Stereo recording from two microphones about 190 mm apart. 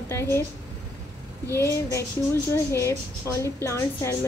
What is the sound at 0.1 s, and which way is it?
Speech, 15° left (ahead or behind).